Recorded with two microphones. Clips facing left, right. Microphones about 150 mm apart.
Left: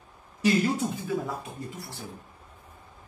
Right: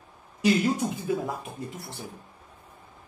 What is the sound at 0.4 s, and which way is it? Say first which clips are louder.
Speech: right 1 dB; 15° right (ahead or behind).